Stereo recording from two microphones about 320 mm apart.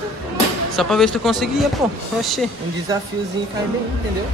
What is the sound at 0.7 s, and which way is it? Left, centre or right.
Speech, centre.